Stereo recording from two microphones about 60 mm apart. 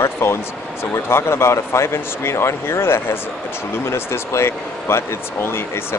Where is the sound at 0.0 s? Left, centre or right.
Left.